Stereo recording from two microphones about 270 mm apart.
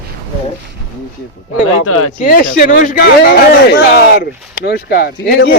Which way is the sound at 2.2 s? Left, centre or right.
Left.